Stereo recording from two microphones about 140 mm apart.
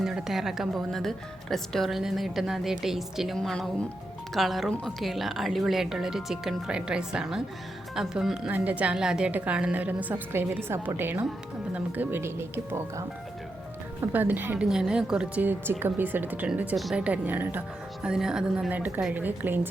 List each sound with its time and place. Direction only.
0.0 s a woman's voice: 5° right (ahead or behind)